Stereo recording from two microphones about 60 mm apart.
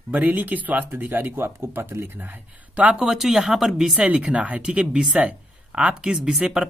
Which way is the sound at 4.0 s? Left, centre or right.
Right.